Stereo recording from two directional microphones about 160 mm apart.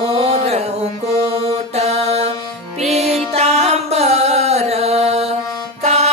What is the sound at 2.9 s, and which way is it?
Music, 40° right (ahead or behind).